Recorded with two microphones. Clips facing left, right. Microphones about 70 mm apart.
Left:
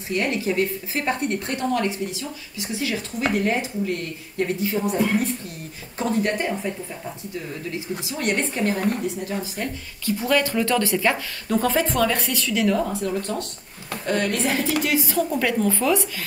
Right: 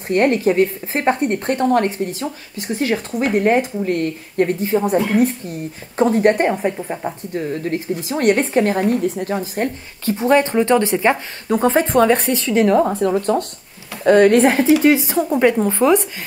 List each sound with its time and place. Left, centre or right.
0.1 s a woman's voice: right
14.8 s a woman's voice: right